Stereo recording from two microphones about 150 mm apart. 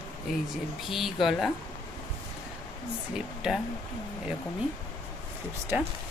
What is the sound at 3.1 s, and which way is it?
Speech, 5° right (ahead or behind).